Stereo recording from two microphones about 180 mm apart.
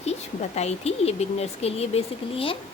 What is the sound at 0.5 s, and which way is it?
A woman's voice, 35° left (ahead or behind).